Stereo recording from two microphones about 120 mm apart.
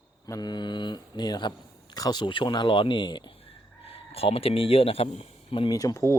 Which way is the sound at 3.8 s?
55° left (ahead or behind).